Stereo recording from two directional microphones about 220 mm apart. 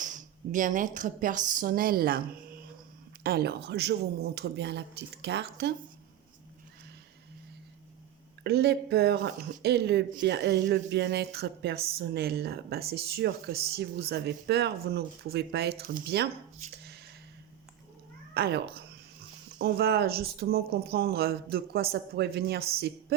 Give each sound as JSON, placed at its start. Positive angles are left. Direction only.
{"t": 0.0, "sound": "speech", "side_deg": -35}
{"t": 3.2, "sound": "speech", "side_deg": -45}
{"t": 8.4, "sound": "speech", "side_deg": -45}
{"t": 18.3, "sound": "speech", "side_deg": -50}